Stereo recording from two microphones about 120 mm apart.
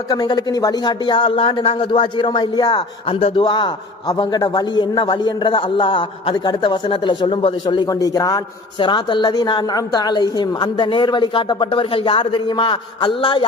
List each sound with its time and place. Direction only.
0.1 s a woman's voice: 35° left (ahead or behind)
8.8 s a woman's voice: 40° left (ahead or behind)